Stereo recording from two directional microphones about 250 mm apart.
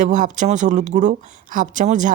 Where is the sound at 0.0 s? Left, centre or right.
Right.